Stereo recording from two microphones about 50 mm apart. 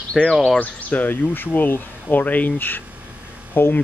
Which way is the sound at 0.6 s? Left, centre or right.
Left.